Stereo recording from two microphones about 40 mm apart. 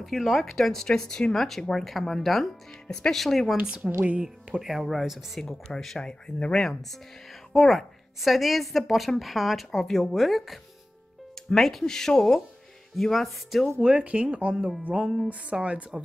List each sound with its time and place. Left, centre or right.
0.0 s a woman's voice: centre
3.8 s speech: centre
5.4 s speech: centre
6.0 s speech: left
6.5 s a woman's voice: centre
11.8 s speech: centre
12.9 s a woman's voice: centre
13.7 s speech: right
14.8 s music: right
15.5 s speech: centre